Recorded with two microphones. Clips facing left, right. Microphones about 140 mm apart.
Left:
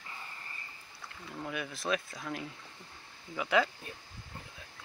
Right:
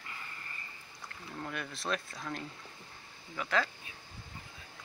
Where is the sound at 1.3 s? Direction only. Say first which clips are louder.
Left 2 dB; 5° left (ahead or behind).